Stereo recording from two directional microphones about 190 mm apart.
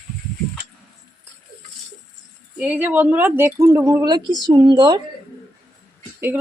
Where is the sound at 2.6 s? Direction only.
10° right (ahead or behind).